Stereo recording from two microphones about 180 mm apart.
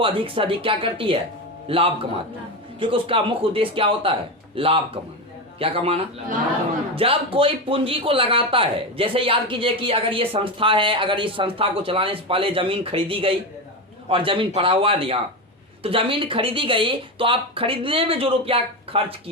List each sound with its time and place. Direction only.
0.0 s a man's voice: 30° right (ahead or behind)